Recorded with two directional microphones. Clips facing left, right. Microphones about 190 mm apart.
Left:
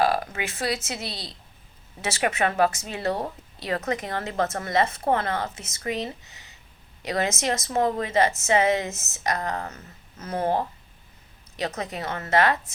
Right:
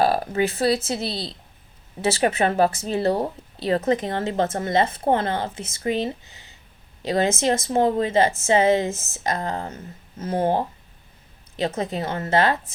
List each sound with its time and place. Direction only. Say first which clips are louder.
0.0 s speech: right 4 dB; 30° right (ahead or behind)